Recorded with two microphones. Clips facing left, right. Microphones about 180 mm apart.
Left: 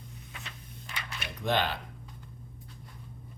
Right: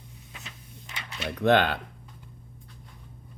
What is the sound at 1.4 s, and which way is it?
Speech, 60° right (ahead or behind).